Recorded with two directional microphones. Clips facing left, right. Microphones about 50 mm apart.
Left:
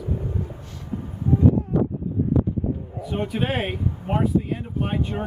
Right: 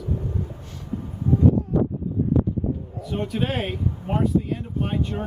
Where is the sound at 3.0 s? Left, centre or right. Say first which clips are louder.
Left 1 dB; centre.